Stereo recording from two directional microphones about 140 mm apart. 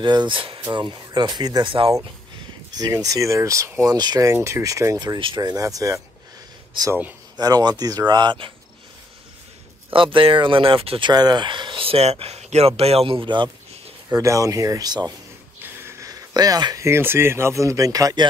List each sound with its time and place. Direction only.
0.0 s speech: 35° right (ahead or behind)
2.8 s speech: 25° right (ahead or behind)
4.3 s speech: 20° right (ahead or behind)
6.9 s speech: 15° right (ahead or behind)
7.3 s speech: 30° right (ahead or behind)
9.9 s speech: 40° right (ahead or behind)
14.0 s speech: 25° right (ahead or behind)
15.6 s speech: 20° right (ahead or behind)